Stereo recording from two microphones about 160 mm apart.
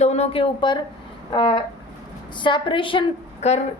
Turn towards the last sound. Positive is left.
turn(degrees=45)  # may be behind; listen again after turning